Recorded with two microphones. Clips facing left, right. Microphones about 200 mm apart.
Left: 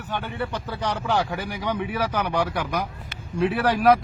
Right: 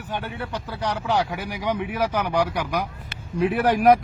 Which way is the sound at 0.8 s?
10° right (ahead or behind).